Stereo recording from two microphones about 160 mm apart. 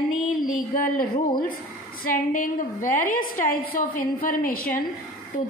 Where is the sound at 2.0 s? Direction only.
55° left (ahead or behind).